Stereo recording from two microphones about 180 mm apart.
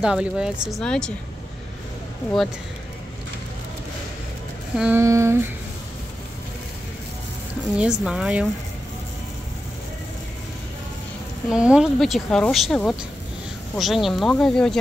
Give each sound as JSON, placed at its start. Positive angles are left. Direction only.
{"t": 0.0, "sound": "speech", "side_deg": -5}
{"t": 4.7, "sound": "a sound", "side_deg": -5}
{"t": 7.7, "sound": "speech", "side_deg": -5}
{"t": 11.5, "sound": "speech", "side_deg": -5}